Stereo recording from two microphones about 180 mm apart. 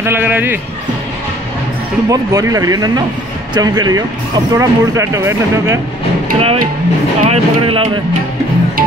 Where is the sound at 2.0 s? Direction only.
20° right (ahead or behind).